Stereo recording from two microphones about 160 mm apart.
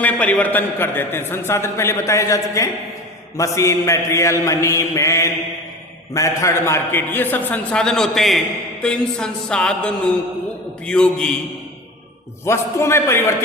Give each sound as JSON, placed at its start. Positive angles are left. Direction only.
{"t": 0.0, "sound": "a man's voice", "side_deg": 10}
{"t": 3.3, "sound": "a sound", "side_deg": 20}
{"t": 6.1, "sound": "a man's voice", "side_deg": 20}
{"t": 12.5, "sound": "a man's voice", "side_deg": 15}